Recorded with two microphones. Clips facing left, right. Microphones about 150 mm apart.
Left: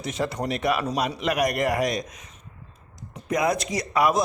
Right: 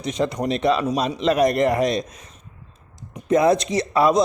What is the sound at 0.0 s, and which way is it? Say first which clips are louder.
Speech: right 4 dB; 20° right (ahead or behind).